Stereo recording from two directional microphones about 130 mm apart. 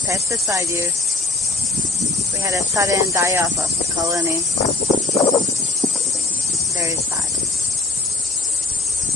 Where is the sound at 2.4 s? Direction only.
25° right (ahead or behind).